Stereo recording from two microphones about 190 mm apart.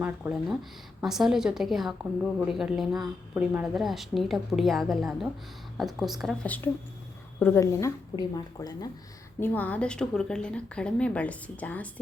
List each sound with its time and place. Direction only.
0.0 s a woman's voice: 5° right (ahead or behind); by 8.9 s 20° left (ahead or behind)
9.4 s a woman's voice: 10° left (ahead or behind)